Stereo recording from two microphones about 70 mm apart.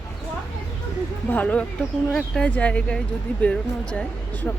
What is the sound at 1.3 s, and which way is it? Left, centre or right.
Speech, left.